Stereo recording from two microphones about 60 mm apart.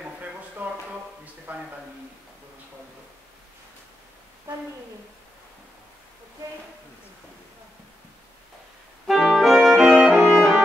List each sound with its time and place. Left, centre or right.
0.6 s a sound: right
9.0 s clarinet: centre
9.8 s music: right
10.1 s music: centre